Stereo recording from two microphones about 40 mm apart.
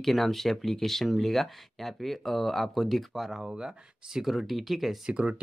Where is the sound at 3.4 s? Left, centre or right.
Centre.